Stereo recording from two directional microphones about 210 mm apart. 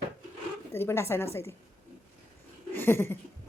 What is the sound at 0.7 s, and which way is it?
Speech, 10° left (ahead or behind).